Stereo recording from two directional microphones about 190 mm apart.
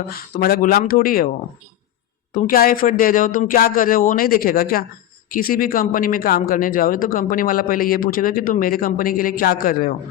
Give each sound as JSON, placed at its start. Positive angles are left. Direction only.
{"t": 0.3, "sound": "speech", "side_deg": 50}
{"t": 2.3, "sound": "speech", "side_deg": 50}